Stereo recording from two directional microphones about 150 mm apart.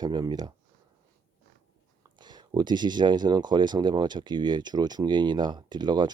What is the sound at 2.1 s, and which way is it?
Speech, 30° right (ahead or behind).